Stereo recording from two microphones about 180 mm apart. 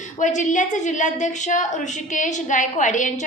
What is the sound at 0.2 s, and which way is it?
A woman's voice, 40° left (ahead or behind).